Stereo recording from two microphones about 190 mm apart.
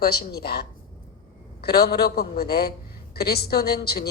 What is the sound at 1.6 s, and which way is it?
A woman's voice, 55° left (ahead or behind).